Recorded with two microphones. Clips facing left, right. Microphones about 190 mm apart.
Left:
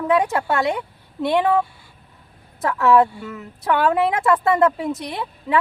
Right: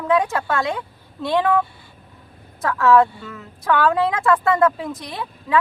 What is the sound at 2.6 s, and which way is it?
Speech, 20° left (ahead or behind).